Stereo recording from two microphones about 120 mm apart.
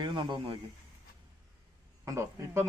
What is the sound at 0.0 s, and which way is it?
Speech, 40° right (ahead or behind).